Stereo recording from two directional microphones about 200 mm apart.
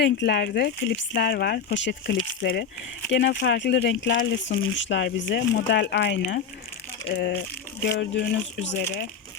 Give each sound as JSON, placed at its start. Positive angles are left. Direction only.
{"t": 0.0, "sound": "speech", "side_deg": 60}